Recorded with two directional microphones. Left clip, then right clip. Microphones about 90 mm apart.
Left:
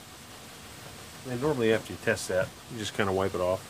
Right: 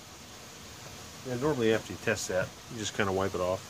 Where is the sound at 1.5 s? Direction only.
25° left (ahead or behind).